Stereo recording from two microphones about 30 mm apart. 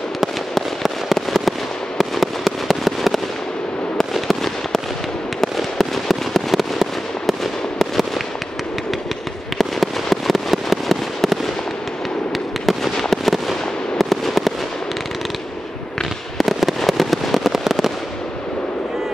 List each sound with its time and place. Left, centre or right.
0.6 s fireworks: centre
5.6 s fireworks: centre
9.6 s fireworks: centre
12.6 s fireworks: centre
16.3 s fireworks: centre